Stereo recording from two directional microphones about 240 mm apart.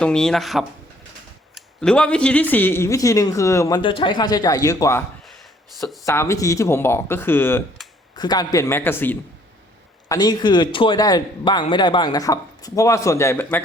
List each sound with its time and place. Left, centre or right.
0.0 s a man's voice: centre
6.1 s a man's voice: centre
7.8 s a sound: centre
8.1 s a man's voice: centre